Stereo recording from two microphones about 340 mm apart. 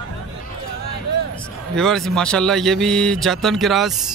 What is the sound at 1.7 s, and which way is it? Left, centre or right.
A man's voice, centre.